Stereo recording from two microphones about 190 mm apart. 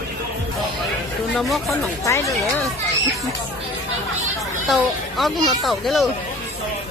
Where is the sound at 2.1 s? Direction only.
15° left (ahead or behind).